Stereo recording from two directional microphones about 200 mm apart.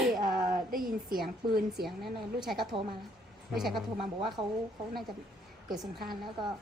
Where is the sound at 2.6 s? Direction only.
25° right (ahead or behind).